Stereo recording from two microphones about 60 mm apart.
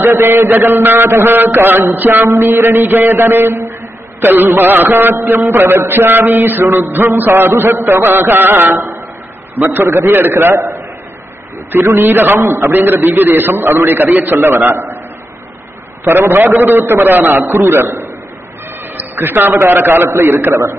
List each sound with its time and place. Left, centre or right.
0.0 s a man's voice: right
2.2 s a man's voice: right
11.7 s a man's voice: right
12.0 s a man's voice: right
16.0 s a man's voice: right
18.9 s a man's voice: right